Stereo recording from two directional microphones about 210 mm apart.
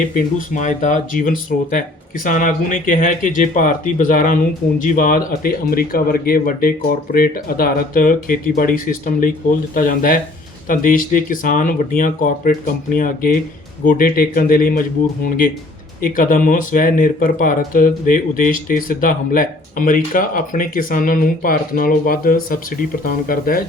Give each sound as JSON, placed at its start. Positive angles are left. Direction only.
{"t": 0.3, "sound": "speech", "side_deg": 35}